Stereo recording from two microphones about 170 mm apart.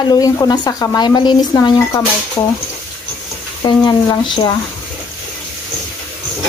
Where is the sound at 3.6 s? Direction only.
25° left (ahead or behind).